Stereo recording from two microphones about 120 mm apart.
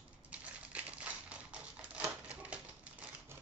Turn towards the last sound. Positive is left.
turn(degrees=-10)  # may be behind; listen again after turning